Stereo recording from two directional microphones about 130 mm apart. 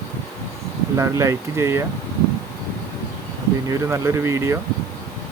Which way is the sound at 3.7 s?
20° right (ahead or behind).